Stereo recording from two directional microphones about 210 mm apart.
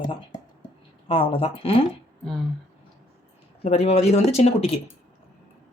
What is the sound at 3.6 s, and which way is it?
Speech, 30° left (ahead or behind).